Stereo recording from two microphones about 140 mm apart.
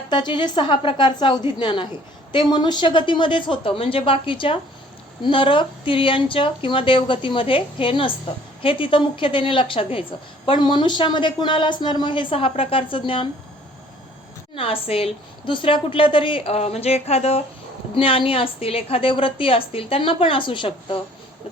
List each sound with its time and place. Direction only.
0.1 s a woman's voice: 30° left (ahead or behind)
14.5 s a woman's voice: 40° left (ahead or behind)